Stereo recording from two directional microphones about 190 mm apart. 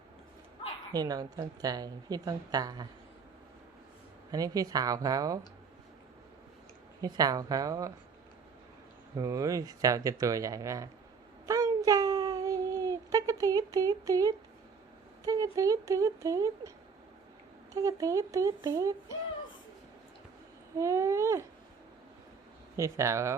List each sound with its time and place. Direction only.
0.9 s a woman's voice: 20° right (ahead or behind)
4.3 s a woman's voice: 20° right (ahead or behind)
7.0 s a woman's voice: 20° right (ahead or behind)
9.1 s speech: 20° right (ahead or behind)
11.4 s a sound: 20° right (ahead or behind)
15.2 s speech: 15° right (ahead or behind)
17.7 s speech: 15° right (ahead or behind)
20.7 s speech: 15° right (ahead or behind)
22.8 s speech: 15° right (ahead or behind)